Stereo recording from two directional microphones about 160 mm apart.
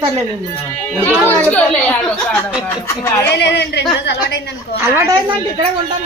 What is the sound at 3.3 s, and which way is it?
A woman's voice, 90° left.